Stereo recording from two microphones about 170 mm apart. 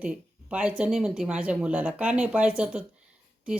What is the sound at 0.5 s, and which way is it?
Speech, 5° right (ahead or behind).